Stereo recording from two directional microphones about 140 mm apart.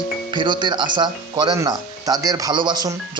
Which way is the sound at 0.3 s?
35° right (ahead or behind).